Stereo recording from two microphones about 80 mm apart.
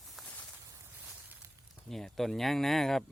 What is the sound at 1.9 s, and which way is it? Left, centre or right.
Speech, centre.